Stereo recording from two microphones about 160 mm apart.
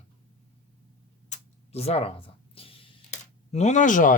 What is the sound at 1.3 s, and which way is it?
Speech, 40° left (ahead or behind).